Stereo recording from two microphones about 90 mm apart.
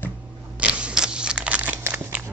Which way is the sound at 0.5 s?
15° right (ahead or behind).